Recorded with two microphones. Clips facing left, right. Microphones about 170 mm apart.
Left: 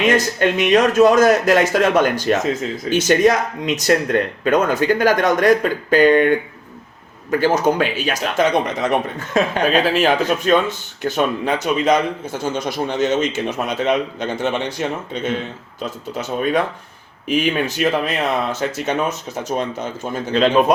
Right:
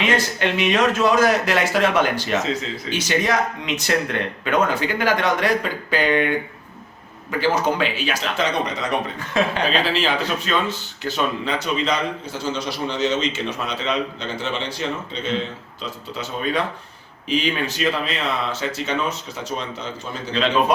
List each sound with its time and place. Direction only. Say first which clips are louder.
0.3 s speech: left 5 dB; 45° left (ahead or behind)